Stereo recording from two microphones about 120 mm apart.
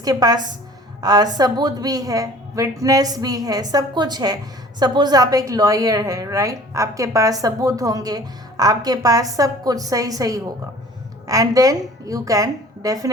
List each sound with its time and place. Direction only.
0.0 s a woman's voice: 30° right (ahead or behind)